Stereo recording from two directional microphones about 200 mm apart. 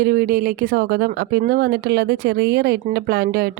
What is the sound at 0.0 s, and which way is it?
Speech, 50° right (ahead or behind).